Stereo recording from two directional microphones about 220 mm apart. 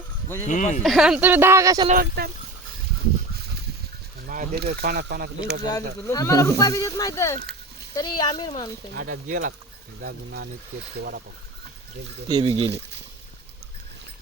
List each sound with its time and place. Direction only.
0.4 s speech: 35° left (ahead or behind)
0.8 s speech: centre (ahead or behind)
1.9 s speech: 40° right (ahead or behind)
4.3 s speech: 40° right (ahead or behind)
5.6 s speech: 15° left (ahead or behind)
9.0 s speech: 40° right (ahead or behind)
10.0 s speech: 50° right (ahead or behind)
12.3 s speech: 25° right (ahead or behind)